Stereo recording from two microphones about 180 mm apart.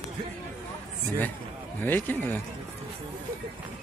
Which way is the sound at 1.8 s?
10° left (ahead or behind).